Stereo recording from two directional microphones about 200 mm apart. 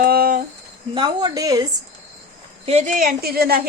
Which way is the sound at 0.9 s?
20° right (ahead or behind).